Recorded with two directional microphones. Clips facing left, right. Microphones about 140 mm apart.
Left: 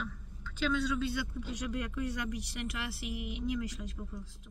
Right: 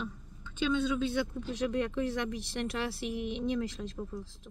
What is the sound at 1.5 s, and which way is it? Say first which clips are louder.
Speech: right 6 dB; 25° right (ahead or behind).